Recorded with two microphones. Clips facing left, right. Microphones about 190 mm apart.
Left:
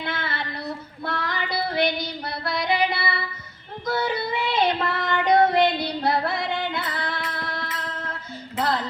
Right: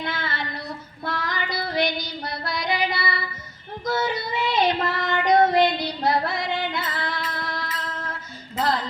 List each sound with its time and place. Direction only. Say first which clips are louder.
0.1 s female singing: even; 60° left (ahead or behind)
1.0 s child singing: even; 60° left (ahead or behind)
8.5 s music: right 1 dB; 60° left (ahead or behind)